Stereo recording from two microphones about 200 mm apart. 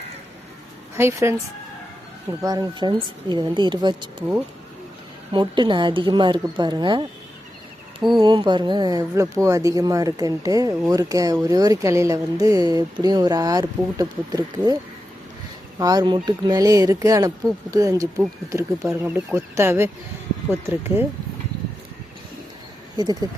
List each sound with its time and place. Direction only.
0.9 s speech: 15° right (ahead or behind)
2.4 s speech: 20° right (ahead or behind)
5.3 s speech: 25° right (ahead or behind)
8.2 s speech: 25° right (ahead or behind)
15.8 s speech: 20° right (ahead or behind)
18.2 s speech: 5° right (ahead or behind)